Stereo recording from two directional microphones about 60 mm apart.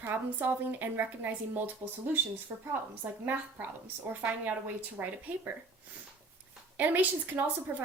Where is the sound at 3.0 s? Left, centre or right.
Right.